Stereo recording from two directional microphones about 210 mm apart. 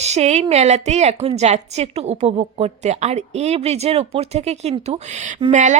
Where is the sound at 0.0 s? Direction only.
30° right (ahead or behind).